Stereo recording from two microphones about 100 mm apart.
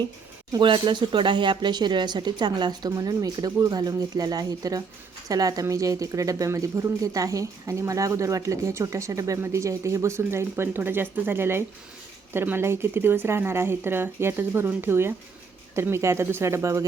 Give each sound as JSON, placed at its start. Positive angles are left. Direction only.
{"t": 0.6, "sound": "speech", "side_deg": -55}